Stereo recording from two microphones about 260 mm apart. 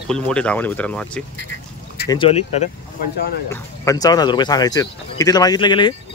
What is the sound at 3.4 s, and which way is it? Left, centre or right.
Speech, centre.